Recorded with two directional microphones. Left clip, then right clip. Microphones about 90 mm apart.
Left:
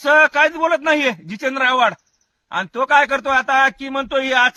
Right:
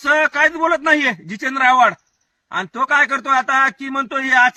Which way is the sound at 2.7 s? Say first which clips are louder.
Left 1 dB; 35° left (ahead or behind).